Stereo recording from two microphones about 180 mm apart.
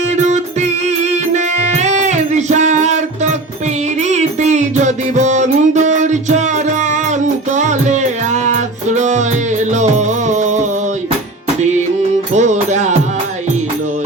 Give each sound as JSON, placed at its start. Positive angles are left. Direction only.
{"t": 1.1, "sound": "music", "side_deg": -40}
{"t": 12.3, "sound": "music", "side_deg": -40}